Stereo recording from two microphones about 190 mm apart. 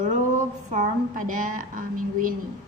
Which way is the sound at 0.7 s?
45° right (ahead or behind).